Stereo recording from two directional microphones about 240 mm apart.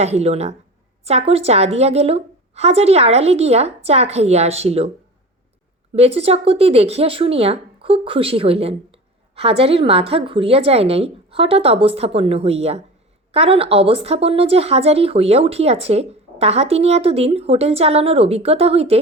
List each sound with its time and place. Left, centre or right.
0.0 s speech: right
5.9 s speech: right